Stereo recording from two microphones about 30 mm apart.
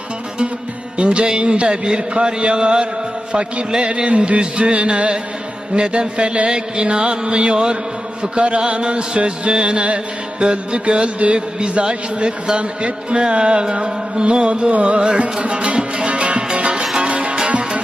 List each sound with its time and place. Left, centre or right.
0.9 s a man's voice: right
6.5 s a man's voice: right
11.3 s a man's voice: right
14.7 s music: right
14.9 s a man's voice: right
16.0 s music: right